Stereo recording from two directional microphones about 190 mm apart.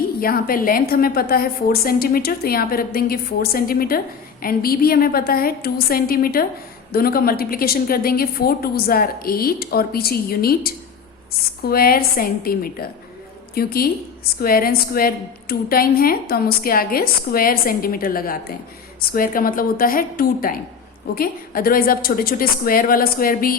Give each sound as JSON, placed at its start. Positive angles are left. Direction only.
{"t": 0.2, "sound": "a woman's voice", "side_deg": 50}